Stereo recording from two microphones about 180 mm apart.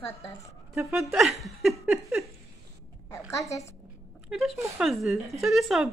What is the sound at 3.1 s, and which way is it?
Speech, 15° left (ahead or behind).